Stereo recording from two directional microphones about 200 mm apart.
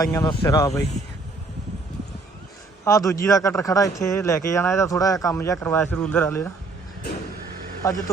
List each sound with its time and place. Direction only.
0.0 s speech: 20° left (ahead or behind)
2.8 s speech: 15° left (ahead or behind)
7.8 s speech: 15° left (ahead or behind)